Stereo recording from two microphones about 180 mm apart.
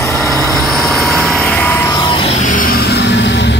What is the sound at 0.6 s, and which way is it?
Vehicle, centre (ahead or behind).